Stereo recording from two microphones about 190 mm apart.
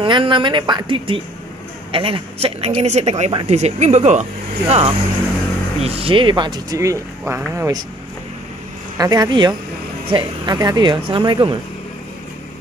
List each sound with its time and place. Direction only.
0.0 s a woman's voice: 25° right (ahead or behind)
8.9 s speech: 20° right (ahead or behind)